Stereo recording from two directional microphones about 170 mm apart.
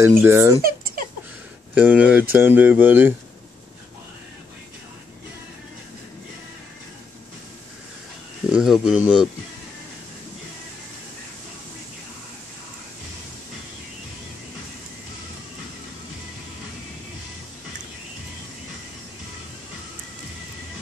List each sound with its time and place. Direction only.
0.0 s speech: 15° right (ahead or behind)
0.6 s a sound: 60° right (ahead or behind)
1.8 s speech: 10° right (ahead or behind)
8.5 s speech: 5° right (ahead or behind)